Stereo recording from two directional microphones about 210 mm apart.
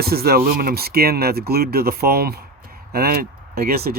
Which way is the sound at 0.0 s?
45° right (ahead or behind).